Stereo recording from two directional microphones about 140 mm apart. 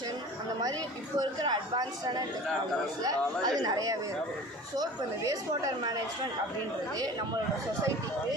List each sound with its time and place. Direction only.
1.2 s a man's voice: 30° right (ahead or behind)